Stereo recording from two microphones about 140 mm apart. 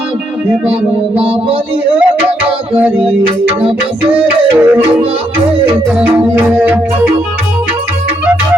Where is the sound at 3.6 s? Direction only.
40° right (ahead or behind).